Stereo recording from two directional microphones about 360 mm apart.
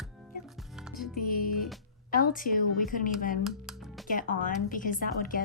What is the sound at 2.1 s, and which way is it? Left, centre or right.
A woman's voice, left.